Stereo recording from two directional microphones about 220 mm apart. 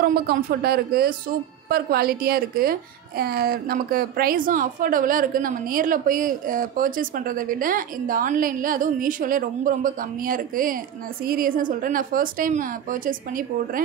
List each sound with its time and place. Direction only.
0.0 s a woman's voice: 45° right (ahead or behind)